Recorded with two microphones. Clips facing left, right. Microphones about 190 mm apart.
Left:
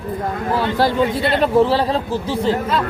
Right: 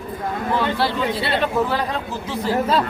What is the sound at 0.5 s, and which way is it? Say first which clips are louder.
Speech: left 5 dB; 45° left (ahead or behind).